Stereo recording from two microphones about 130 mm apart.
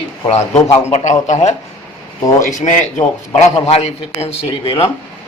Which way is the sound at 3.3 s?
55° left (ahead or behind).